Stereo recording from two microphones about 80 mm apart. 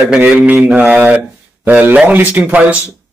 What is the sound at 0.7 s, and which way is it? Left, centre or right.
Speech, centre.